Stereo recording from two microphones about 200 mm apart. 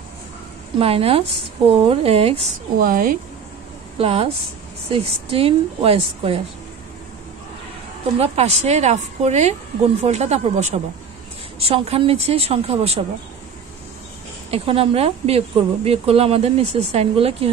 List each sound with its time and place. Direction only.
0.7 s speech: 30° right (ahead or behind)
2.8 s a woman's voice: 45° right (ahead or behind)
4.0 s speech: 30° right (ahead or behind)
8.2 s a woman's voice: 35° right (ahead or behind)
14.5 s speech: 30° right (ahead or behind)